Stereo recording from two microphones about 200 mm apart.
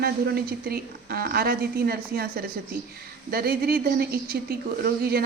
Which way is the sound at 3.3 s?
50° right (ahead or behind).